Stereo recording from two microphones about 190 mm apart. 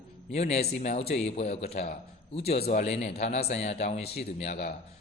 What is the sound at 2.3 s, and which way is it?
Speech, 30° left (ahead or behind).